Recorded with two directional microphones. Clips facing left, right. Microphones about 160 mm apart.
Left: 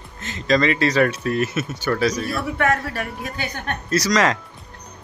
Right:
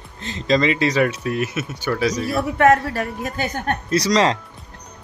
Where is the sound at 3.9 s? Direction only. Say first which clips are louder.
Right 1 dB; 30° right (ahead or behind).